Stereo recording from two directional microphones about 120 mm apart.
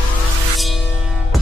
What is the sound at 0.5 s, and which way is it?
Music, centre (ahead or behind).